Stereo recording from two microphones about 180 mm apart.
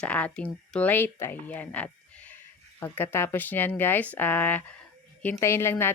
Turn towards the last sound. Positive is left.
turn(degrees=15)  # may be behind; listen again after turning